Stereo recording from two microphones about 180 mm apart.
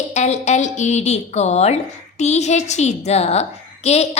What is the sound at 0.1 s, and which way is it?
A woman's voice, 40° left (ahead or behind).